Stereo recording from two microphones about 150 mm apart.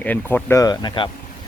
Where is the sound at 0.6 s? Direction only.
25° left (ahead or behind).